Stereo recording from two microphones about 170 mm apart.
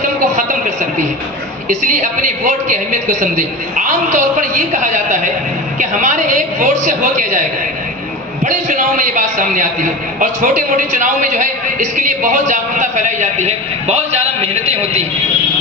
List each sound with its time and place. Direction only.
0.3 s a sound: 45° right (ahead or behind)
1.6 s a man's voice: 45° right (ahead or behind)
8.4 s a man's voice: 45° right (ahead or behind)